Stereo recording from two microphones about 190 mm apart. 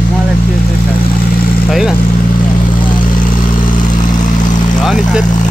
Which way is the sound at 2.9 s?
45° left (ahead or behind).